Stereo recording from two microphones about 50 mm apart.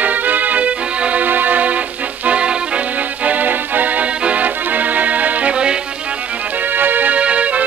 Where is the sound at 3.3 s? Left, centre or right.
Right.